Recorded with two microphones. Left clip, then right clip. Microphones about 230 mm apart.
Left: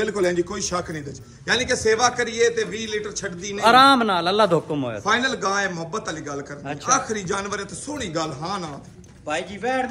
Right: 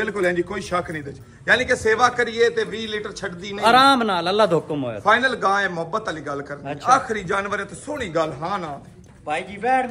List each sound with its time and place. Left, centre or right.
0.0 s a man's voice: centre
9.3 s a man's voice: right